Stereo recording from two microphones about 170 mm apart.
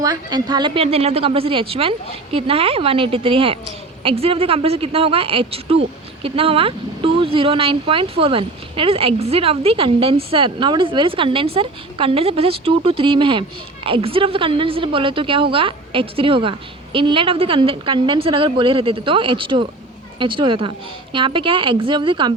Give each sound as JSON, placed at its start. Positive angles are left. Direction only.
{"t": 0.0, "sound": "a woman's voice", "side_deg": -25}